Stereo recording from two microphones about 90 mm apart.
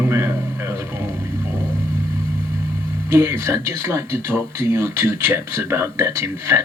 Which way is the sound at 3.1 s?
30° right (ahead or behind).